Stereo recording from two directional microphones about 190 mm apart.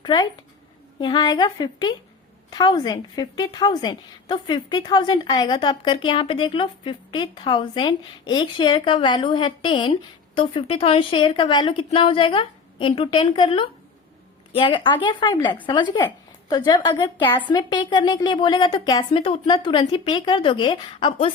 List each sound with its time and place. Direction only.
0.0 s a woman's voice: 20° left (ahead or behind)